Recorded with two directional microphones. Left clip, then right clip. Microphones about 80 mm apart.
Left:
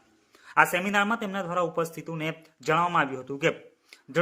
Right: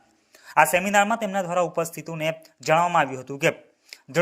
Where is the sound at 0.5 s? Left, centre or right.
Right.